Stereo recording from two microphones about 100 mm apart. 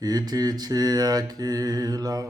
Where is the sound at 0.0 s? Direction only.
40° right (ahead or behind).